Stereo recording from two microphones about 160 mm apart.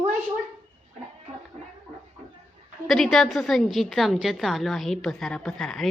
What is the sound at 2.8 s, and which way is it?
A woman's voice, centre (ahead or behind).